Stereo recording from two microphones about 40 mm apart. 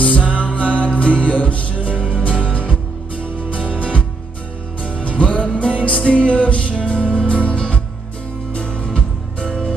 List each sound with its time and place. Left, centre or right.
0.0 s music: left; by 9.8 s centre